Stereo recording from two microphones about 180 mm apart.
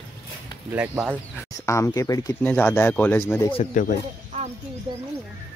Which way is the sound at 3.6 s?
45° left (ahead or behind).